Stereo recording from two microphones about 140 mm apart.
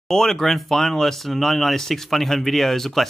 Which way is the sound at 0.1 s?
5° left (ahead or behind).